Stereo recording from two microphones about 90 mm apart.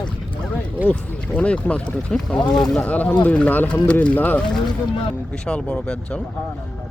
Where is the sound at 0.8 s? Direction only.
15° left (ahead or behind).